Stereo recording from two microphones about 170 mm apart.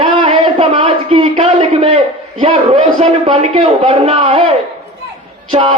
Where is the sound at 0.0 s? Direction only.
30° right (ahead or behind).